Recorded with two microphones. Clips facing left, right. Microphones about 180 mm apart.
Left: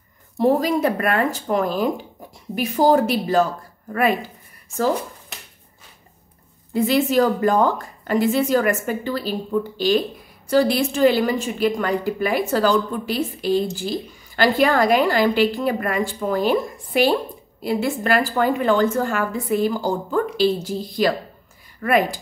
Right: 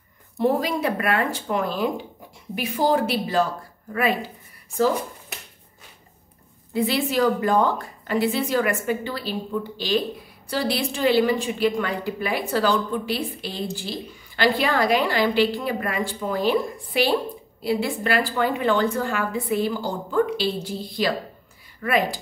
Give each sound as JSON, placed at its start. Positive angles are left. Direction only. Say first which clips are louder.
{"t": 0.4, "sound": "a woman's voice", "louder": "left 4 dB", "side_deg": 40}
{"t": 6.7, "sound": "a woman's voice", "louder": "left 5 dB", "side_deg": 45}